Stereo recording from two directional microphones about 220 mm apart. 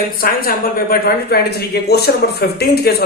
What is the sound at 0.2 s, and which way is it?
Speech, 40° left (ahead or behind).